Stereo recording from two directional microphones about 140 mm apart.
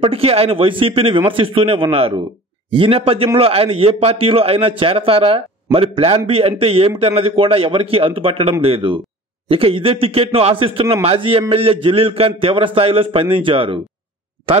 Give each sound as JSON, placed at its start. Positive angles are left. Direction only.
{"t": 0.0, "sound": "a man's voice", "side_deg": -45}